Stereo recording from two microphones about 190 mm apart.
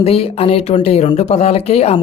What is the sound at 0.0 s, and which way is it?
Speech, 30° left (ahead or behind).